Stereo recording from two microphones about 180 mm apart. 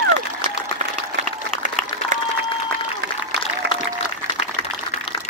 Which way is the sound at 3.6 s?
70° right (ahead or behind).